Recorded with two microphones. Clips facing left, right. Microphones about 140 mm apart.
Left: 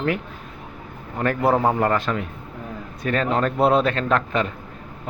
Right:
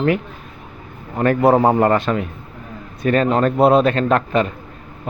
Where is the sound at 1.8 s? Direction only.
60° right (ahead or behind).